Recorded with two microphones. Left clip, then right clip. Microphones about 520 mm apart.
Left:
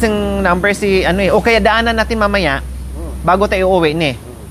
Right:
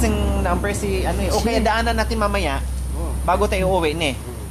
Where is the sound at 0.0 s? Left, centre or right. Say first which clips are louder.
Left 8 dB; left.